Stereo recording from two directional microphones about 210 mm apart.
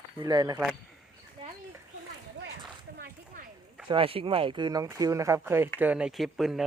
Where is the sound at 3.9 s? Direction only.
25° right (ahead or behind).